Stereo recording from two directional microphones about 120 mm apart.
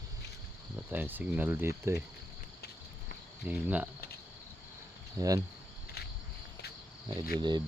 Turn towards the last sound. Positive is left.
turn(degrees=-35)  # may be behind; listen again after turning